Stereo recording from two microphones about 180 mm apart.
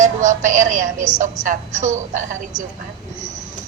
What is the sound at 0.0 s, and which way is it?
A woman's voice, 45° right (ahead or behind).